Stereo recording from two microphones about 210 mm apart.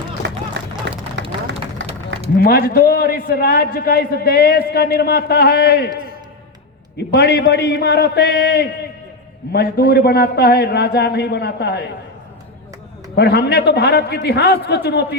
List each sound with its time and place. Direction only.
0.2 s run: 55° right (ahead or behind)
0.9 s clapping: 60° right (ahead or behind)
2.4 s a man's voice: 45° left (ahead or behind)
7.1 s a man's voice: 50° left (ahead or behind)
13.1 s a man's voice: 50° left (ahead or behind)